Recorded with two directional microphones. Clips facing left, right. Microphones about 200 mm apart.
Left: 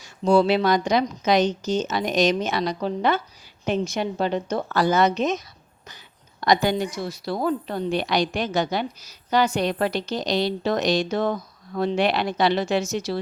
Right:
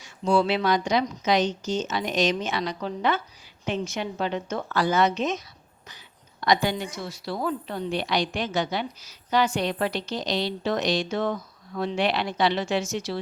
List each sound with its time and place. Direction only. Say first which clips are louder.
0.0 s a woman's voice: left 4 dB; 40° left (ahead or behind)
6.4 s a woman's voice: left 3 dB; 40° left (ahead or behind)